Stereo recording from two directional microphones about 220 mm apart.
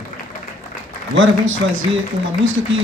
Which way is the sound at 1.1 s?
55° right (ahead or behind).